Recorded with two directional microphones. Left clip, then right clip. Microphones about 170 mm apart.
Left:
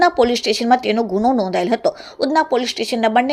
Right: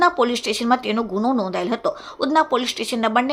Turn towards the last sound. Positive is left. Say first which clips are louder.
# left 4 dB
turn(degrees=10)  # may be behind; listen again after turning